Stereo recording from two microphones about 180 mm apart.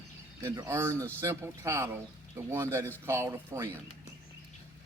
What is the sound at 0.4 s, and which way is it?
Speech, 15° right (ahead or behind).